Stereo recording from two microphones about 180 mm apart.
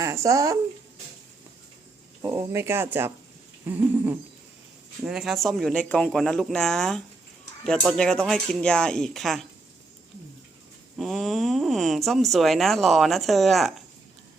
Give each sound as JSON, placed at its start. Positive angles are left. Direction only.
{"t": 0.0, "sound": "speech", "side_deg": -15}
{"t": 2.2, "sound": "speech", "side_deg": -15}
{"t": 10.9, "sound": "speech", "side_deg": 0}